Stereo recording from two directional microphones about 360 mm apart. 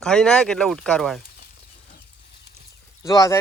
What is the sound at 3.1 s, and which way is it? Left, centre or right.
Speech, centre.